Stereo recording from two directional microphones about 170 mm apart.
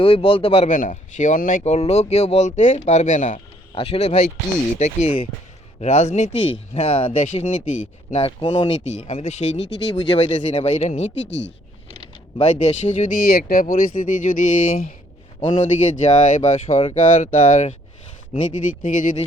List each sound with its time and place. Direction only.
0.0 s speech: 35° left (ahead or behind)
3.8 s speech: 35° left (ahead or behind)
6.3 s speech: 30° left (ahead or behind)
8.7 s speech: 40° left (ahead or behind)
11.3 s speech: 90° left
12.4 s speech: 40° left (ahead or behind)
15.4 s speech: 30° left (ahead or behind)
15.9 s speech: 45° left (ahead or behind)